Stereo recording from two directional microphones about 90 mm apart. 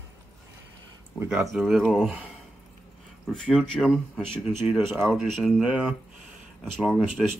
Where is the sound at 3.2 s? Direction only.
5° left (ahead or behind).